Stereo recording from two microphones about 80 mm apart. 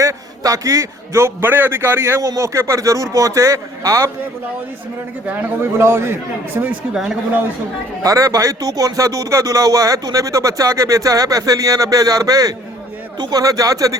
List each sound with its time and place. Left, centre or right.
0.0 s a man's voice: right
5.2 s speech: right
5.8 s a man's voice: right
6.9 s a man's voice: centre
8.0 s speech: right
13.1 s speech: right
13.4 s speech: right